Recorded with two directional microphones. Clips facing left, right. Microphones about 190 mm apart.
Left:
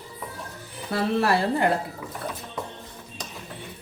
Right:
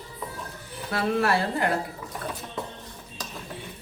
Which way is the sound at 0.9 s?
30° left (ahead or behind).